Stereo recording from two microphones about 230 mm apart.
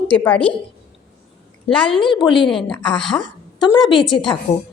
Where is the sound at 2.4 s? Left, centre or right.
Centre.